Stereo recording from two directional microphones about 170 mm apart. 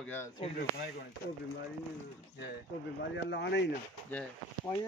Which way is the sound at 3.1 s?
90° left.